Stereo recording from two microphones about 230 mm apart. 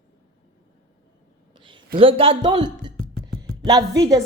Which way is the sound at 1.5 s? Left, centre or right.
Right.